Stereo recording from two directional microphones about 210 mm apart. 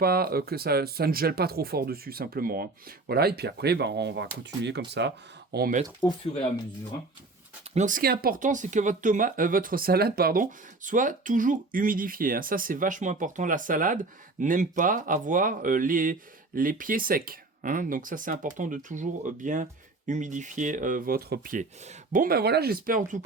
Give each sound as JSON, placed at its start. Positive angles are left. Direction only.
{"t": 0.0, "sound": "speech", "side_deg": -45}
{"t": 6.0, "sound": "speech", "side_deg": 20}
{"t": 7.7, "sound": "speech", "side_deg": -35}